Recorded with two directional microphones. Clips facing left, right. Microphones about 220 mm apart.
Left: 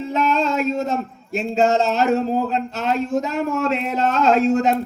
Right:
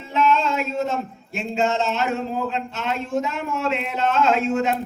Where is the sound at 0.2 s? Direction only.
40° left (ahead or behind).